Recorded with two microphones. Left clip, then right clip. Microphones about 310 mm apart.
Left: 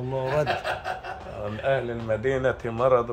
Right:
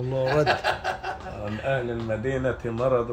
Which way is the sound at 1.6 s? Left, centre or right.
Centre.